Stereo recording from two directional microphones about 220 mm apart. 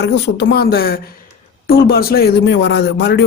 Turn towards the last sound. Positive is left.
turn(degrees=50)  # may be behind; listen again after turning